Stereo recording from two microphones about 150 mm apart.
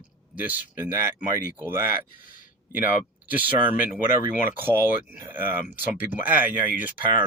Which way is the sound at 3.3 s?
10° right (ahead or behind).